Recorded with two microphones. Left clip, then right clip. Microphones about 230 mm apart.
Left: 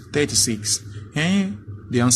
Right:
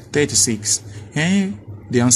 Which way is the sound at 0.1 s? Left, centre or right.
Centre.